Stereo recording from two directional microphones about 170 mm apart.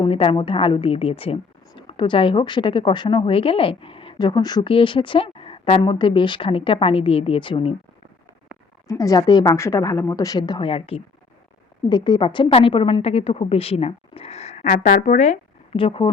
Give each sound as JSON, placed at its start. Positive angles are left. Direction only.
{"t": 0.0, "sound": "a woman's voice", "side_deg": 30}
{"t": 8.9, "sound": "a woman's voice", "side_deg": 20}